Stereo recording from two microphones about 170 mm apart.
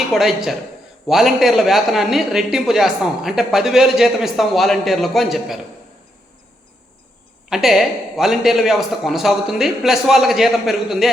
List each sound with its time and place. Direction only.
0.1 s speech: centre (ahead or behind)
7.5 s speech: centre (ahead or behind)